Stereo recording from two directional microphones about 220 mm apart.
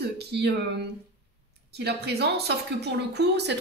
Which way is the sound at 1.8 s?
50° right (ahead or behind).